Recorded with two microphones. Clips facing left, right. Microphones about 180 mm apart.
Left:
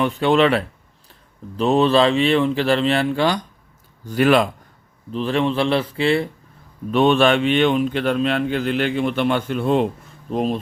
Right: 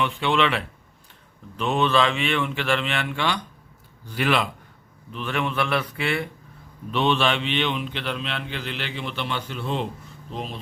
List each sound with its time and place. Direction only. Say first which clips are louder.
0.0 s speech: left 6 dB; 40° left (ahead or behind)
5.1 s speech: left 7 dB; 30° left (ahead or behind)
6.9 s speech: left 7 dB; 50° left (ahead or behind)